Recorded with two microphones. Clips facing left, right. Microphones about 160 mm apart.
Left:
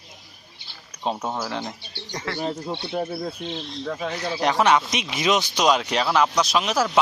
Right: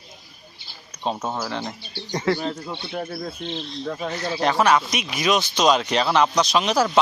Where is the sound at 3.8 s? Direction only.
5° right (ahead or behind).